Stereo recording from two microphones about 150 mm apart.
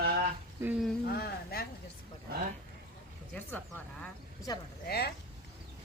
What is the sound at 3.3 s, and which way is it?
Speech, 10° left (ahead or behind).